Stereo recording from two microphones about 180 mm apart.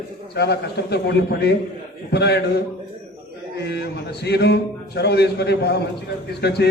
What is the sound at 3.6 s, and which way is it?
A man's voice, 65° left (ahead or behind).